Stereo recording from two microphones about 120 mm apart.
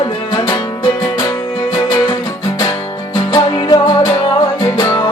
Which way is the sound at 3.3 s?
35° left (ahead or behind).